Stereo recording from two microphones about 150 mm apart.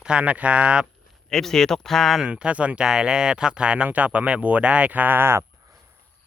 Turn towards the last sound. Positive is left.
turn(degrees=-15)  # may be behind; listen again after turning